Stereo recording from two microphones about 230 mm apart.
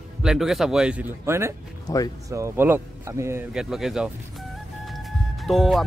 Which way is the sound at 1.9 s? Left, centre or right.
Centre.